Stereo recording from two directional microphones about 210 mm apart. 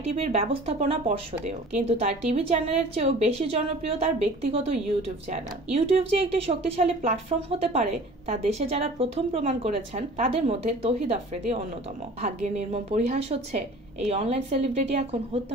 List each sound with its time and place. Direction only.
0.1 s a woman's voice: 30° right (ahead or behind)